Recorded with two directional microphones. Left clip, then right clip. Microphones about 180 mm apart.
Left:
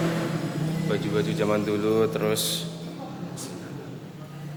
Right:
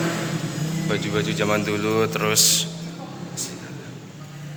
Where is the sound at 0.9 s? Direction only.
5° right (ahead or behind); by 2.6 s 15° left (ahead or behind).